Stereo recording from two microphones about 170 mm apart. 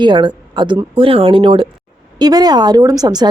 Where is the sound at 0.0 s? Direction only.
25° right (ahead or behind).